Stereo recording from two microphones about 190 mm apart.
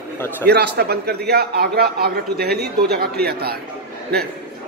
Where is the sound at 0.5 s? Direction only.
60° right (ahead or behind).